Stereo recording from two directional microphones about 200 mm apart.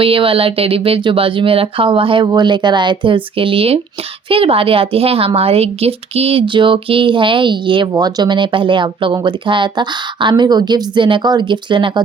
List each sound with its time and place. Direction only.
0.0 s a woman's voice: 25° right (ahead or behind)